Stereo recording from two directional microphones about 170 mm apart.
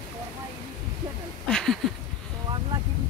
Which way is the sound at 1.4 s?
5° left (ahead or behind).